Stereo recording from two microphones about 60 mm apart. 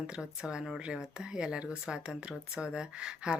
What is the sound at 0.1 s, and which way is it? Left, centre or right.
Speech, centre.